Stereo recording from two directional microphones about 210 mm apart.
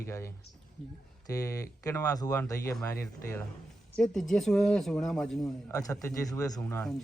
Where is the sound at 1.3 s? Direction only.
15° left (ahead or behind).